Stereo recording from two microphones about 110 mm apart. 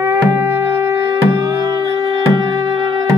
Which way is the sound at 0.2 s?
20° right (ahead or behind).